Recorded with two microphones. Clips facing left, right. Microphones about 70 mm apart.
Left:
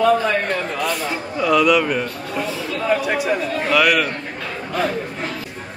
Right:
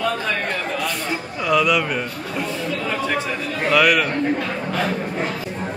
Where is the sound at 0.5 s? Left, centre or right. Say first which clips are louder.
Left 2 dB; centre.